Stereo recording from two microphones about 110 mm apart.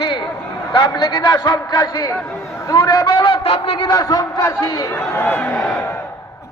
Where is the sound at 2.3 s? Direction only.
25° left (ahead or behind); by 3.9 s 55° left (ahead or behind).